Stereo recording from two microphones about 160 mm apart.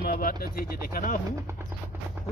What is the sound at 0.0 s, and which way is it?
Speech, 65° left (ahead or behind).